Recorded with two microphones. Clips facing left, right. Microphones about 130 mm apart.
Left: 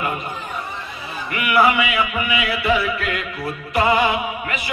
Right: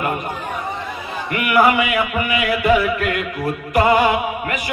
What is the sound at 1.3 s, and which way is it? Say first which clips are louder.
Music: right 2 dB; 50° right (ahead or behind).